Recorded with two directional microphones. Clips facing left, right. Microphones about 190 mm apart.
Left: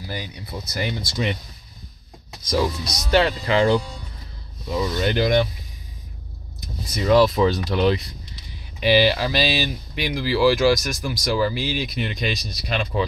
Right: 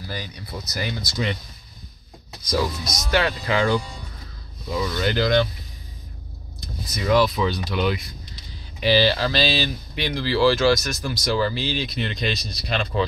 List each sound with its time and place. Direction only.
0.1 s speech: 20° left (ahead or behind)
2.4 s speech: 30° left (ahead or behind)
4.8 s speech: 20° left (ahead or behind)
7.2 s speech: 45° left (ahead or behind)
8.8 s speech: 15° left (ahead or behind)